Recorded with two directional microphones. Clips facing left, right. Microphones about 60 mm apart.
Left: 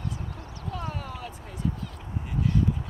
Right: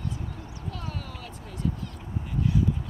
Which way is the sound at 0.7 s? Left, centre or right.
Centre.